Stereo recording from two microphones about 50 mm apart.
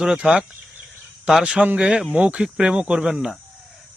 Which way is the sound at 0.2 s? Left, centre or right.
Centre.